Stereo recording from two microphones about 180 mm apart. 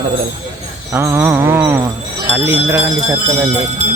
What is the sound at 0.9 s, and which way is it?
Speech, 15° right (ahead or behind).